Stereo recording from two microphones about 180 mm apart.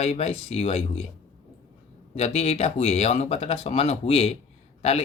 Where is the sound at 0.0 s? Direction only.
35° left (ahead or behind).